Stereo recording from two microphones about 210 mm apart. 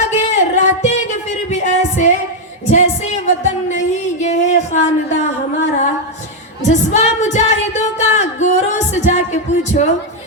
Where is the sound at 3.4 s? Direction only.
35° left (ahead or behind).